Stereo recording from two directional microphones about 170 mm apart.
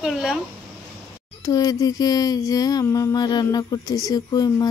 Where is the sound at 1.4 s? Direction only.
20° left (ahead or behind).